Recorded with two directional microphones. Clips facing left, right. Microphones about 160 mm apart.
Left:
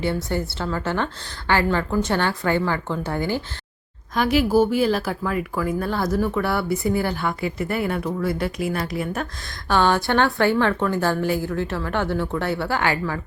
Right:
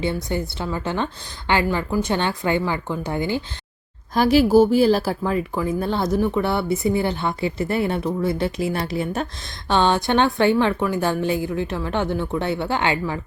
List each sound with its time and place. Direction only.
0.0 s a woman's voice: 15° right (ahead or behind)
4.1 s a woman's voice: 35° right (ahead or behind)